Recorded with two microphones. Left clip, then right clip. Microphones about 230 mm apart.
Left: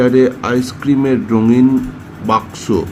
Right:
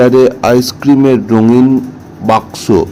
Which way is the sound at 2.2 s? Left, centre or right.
Centre.